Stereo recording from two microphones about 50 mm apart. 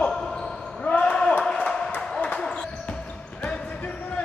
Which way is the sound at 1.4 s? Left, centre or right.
Centre.